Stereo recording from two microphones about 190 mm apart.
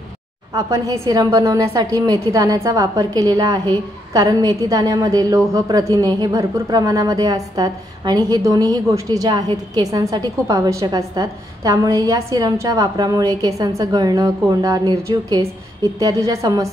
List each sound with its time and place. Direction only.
0.6 s a woman's voice: 15° right (ahead or behind)